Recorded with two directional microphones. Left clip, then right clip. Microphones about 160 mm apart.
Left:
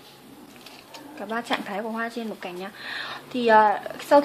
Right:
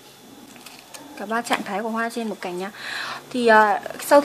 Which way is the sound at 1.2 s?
10° right (ahead or behind).